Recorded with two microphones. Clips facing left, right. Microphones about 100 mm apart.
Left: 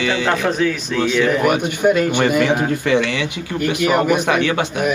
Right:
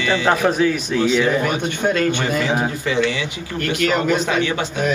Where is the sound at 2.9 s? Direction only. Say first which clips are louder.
Left 3 dB; 60° left (ahead or behind).